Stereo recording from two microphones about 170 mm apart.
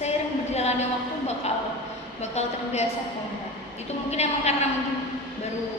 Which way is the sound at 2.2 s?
40° left (ahead or behind).